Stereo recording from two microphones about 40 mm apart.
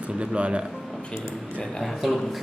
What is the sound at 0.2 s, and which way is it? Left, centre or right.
Speech, right.